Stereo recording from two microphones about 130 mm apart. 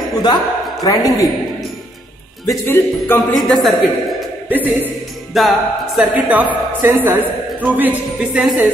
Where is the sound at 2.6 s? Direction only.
15° left (ahead or behind).